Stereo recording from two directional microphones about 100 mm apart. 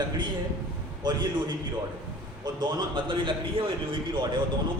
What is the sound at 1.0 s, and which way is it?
Speech, 45° right (ahead or behind).